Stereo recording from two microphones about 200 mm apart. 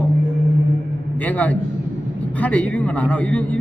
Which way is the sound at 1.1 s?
10° left (ahead or behind).